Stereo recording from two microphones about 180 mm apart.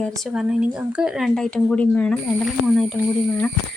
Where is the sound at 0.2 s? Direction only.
5° right (ahead or behind).